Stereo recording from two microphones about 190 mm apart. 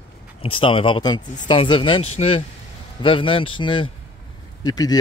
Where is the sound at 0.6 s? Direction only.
25° left (ahead or behind).